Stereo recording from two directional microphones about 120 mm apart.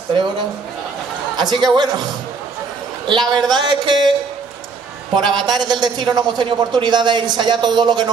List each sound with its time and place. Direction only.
1.3 s a man's voice: 35° right (ahead or behind)
3.1 s a man's voice: 40° right (ahead or behind)
5.1 s a man's voice: centre (ahead or behind)
5.7 s a man's voice: 35° right (ahead or behind)